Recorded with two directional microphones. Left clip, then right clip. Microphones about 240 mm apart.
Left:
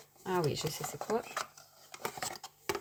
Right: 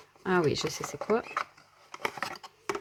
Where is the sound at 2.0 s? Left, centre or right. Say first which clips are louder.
Right 6 dB; right.